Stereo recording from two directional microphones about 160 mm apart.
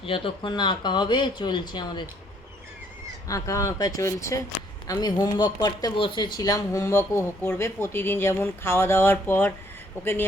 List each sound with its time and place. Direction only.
0.0 s speech: 30° left (ahead or behind)
3.2 s speech: 20° left (ahead or behind)